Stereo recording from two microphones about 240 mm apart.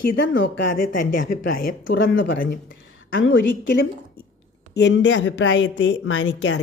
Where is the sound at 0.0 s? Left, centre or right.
Left.